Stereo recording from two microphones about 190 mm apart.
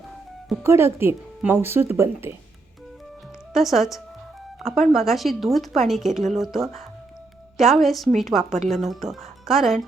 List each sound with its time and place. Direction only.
0.6 s speech: 15° right (ahead or behind)
3.5 s speech: centre (ahead or behind)